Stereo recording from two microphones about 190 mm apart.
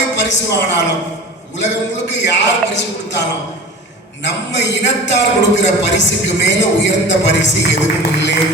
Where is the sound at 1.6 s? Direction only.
65° left (ahead or behind).